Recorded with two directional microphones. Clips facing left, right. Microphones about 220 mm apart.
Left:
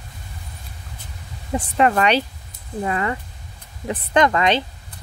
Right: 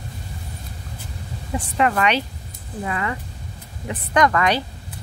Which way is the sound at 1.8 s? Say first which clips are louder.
Left 2 dB; 35° left (ahead or behind).